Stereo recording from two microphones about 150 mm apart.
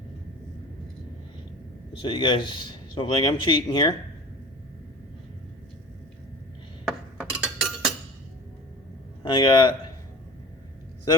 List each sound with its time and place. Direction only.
2.0 s a man's voice: 35° left (ahead or behind)
7.2 s chink: 5° right (ahead or behind)
9.2 s a man's voice: 30° left (ahead or behind)